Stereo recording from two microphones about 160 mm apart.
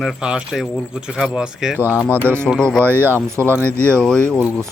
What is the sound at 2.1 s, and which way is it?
Speech, 15° right (ahead or behind).